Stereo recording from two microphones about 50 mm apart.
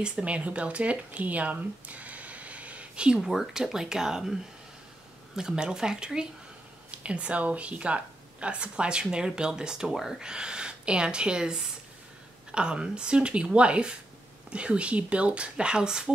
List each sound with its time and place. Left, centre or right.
0.0 s speech: right
3.3 s speech: centre